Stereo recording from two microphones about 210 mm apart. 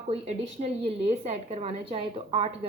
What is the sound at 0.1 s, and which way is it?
A woman's voice, 30° right (ahead or behind).